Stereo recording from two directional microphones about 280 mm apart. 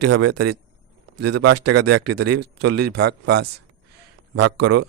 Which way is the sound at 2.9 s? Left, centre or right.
Right.